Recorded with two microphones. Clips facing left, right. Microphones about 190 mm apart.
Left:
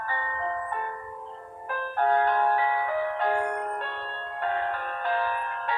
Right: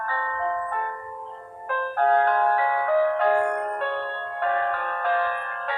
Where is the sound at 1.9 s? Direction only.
55° right (ahead or behind).